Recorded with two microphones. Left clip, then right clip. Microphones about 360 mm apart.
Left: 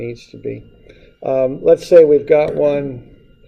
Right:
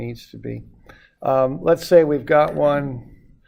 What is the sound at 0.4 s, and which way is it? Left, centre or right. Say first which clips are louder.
Speech: left 7 dB; right.